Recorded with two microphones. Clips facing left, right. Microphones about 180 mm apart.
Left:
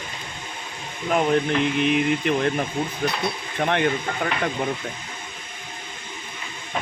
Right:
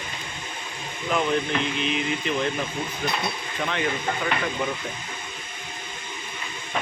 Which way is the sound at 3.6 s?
55° left (ahead or behind).